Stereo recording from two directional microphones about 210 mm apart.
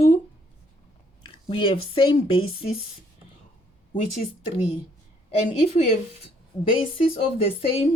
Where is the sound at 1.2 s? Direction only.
25° left (ahead or behind).